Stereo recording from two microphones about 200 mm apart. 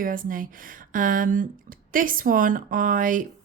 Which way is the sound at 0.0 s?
45° right (ahead or behind).